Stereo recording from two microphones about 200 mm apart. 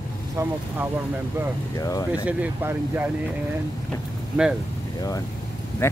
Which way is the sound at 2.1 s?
5° right (ahead or behind).